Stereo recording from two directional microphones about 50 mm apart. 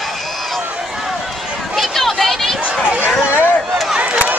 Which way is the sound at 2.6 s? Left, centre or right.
Right.